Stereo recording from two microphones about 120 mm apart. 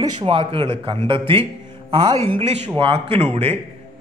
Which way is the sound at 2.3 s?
60° right (ahead or behind).